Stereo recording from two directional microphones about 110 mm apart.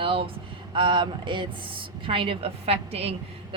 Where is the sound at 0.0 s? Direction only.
55° right (ahead or behind).